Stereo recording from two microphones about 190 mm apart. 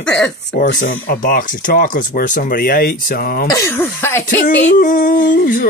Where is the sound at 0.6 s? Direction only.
45° left (ahead or behind).